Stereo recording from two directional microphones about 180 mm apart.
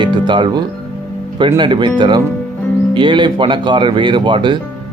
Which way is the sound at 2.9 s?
25° right (ahead or behind).